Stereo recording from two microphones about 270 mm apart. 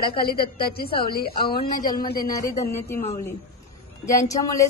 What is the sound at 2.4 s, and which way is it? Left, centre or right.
Speech, centre.